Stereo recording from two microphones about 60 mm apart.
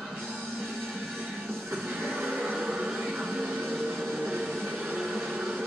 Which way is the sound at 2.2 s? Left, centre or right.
Centre.